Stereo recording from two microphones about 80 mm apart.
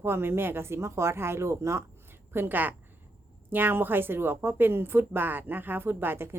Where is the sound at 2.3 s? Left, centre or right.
Right.